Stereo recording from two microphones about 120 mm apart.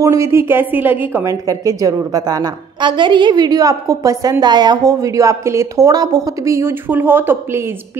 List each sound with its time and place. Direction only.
0.0 s a woman's voice: 25° right (ahead or behind)